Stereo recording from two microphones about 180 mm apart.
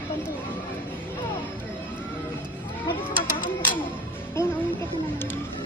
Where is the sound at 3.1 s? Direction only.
50° left (ahead or behind).